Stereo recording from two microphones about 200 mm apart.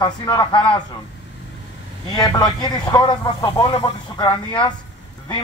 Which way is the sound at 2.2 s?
20° left (ahead or behind).